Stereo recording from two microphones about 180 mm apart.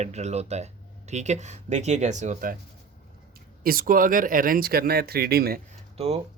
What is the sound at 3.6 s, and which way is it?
Speech, 50° right (ahead or behind).